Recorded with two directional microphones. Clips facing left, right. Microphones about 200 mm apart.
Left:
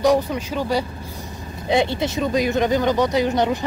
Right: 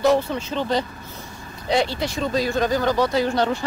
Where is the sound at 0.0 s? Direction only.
15° left (ahead or behind).